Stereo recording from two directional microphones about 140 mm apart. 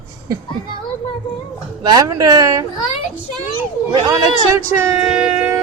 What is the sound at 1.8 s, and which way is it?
Speech, 25° right (ahead or behind).